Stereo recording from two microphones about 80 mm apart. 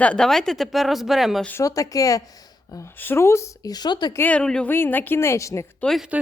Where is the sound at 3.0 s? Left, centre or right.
Left.